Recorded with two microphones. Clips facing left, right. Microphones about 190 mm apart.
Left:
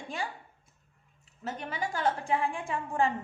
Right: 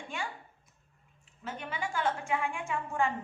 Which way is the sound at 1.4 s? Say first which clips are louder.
Left 2 dB; 40° left (ahead or behind).